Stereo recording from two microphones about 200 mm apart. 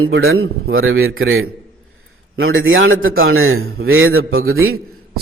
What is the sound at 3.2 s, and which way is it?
A man's voice, 90° right.